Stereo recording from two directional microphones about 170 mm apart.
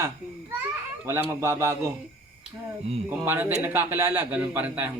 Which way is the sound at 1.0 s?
15° right (ahead or behind).